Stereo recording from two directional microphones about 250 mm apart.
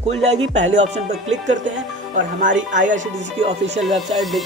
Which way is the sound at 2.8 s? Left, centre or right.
Right.